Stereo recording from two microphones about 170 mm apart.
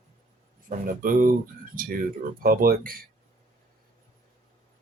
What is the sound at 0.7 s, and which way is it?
Speech, 55° right (ahead or behind).